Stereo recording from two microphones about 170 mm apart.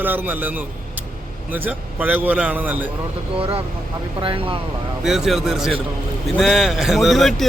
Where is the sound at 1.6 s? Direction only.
10° right (ahead or behind).